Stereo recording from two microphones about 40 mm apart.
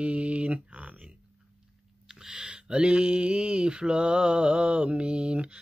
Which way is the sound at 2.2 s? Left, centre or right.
Centre.